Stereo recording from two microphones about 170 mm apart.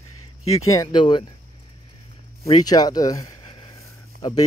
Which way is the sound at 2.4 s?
20° left (ahead or behind).